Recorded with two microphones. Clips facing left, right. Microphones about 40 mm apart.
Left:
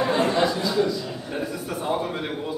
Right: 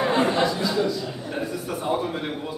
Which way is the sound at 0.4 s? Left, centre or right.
Centre.